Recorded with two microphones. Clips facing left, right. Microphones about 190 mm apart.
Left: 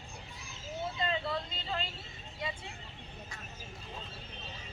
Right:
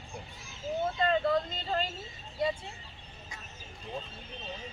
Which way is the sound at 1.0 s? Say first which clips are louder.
Right 8 dB; 50° right (ahead or behind).